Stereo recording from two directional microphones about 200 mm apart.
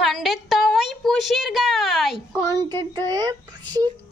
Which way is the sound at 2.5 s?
20° right (ahead or behind).